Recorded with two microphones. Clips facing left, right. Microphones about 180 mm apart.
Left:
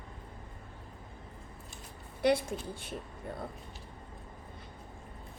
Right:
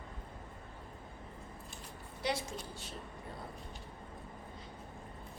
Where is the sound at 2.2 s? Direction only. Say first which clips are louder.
Left 9 dB; 55° left (ahead or behind).